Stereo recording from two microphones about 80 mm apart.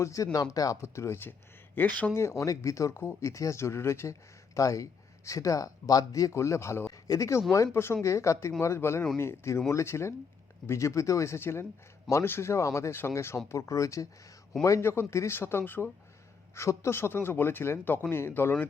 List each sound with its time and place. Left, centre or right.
0.0 s speech: left
0.8 s speech: left
6.9 s a man's voice: left